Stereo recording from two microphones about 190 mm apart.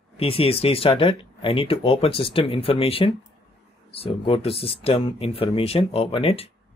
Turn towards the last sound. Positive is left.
turn(degrees=30)  # may be behind; listen again after turning